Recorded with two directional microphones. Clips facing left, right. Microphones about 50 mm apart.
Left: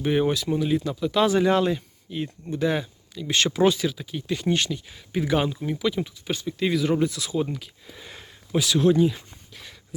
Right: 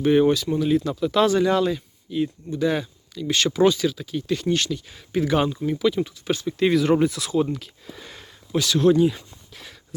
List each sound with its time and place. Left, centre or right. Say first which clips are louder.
0.0 s speech: right 5 dB; centre
1.3 s speech: right 1 dB; centre
3.2 s speech: right 2 dB; left
4.9 s speech: right 4 dB; centre
8.1 s a sound: even; centre
8.6 s speech: right 2 dB; centre